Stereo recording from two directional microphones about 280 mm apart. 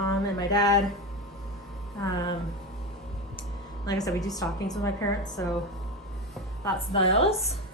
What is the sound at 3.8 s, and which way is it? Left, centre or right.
Speech, centre.